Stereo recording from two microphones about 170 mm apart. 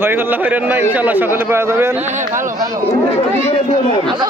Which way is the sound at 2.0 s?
45° right (ahead or behind).